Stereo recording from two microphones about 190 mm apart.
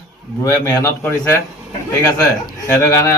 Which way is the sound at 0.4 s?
15° left (ahead or behind).